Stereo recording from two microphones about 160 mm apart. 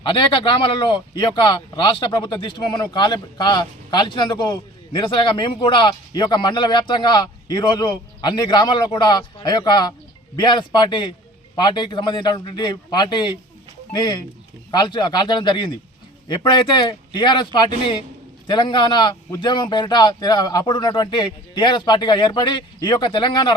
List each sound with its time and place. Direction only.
0.0 s speech: 30° left (ahead or behind)